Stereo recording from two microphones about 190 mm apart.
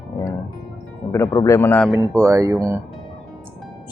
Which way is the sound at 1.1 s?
15° left (ahead or behind).